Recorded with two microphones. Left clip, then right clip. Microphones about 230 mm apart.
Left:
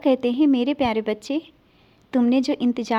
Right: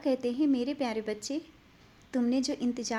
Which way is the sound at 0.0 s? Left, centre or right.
Left.